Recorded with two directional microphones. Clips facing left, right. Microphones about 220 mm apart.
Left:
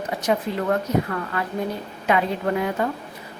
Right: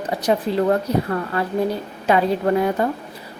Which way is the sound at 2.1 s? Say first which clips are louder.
Right 4 dB; 35° right (ahead or behind).